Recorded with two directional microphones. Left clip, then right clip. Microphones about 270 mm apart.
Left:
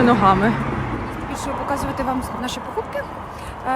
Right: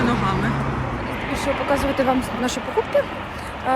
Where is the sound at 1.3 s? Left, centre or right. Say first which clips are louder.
Right 3 dB; centre.